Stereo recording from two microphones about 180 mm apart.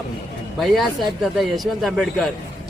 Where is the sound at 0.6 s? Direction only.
Centre (ahead or behind).